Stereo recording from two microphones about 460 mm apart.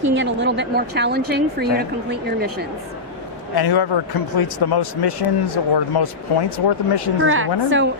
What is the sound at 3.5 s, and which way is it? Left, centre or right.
Speech, left.